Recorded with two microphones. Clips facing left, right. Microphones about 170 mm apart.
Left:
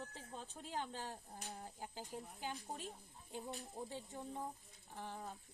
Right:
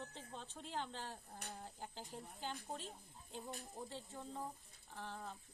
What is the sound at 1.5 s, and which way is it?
Speech, centre (ahead or behind).